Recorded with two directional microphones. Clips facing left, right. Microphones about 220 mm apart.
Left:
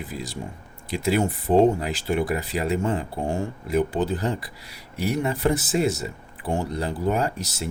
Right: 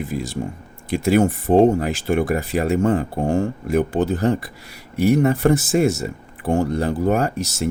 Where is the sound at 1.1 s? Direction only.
50° right (ahead or behind).